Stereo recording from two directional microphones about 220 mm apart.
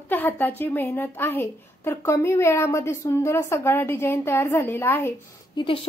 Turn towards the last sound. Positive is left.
turn(degrees=20)  # may be behind; listen again after turning